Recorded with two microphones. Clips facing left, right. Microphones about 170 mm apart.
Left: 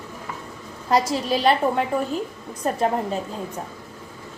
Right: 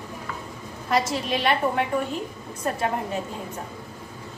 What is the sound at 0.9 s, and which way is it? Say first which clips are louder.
Speech: left 3 dB; 35° left (ahead or behind).